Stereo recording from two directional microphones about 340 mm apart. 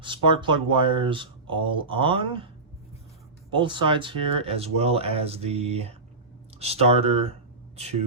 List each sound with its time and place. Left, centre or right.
0.0 s speech: centre
3.5 s speech: centre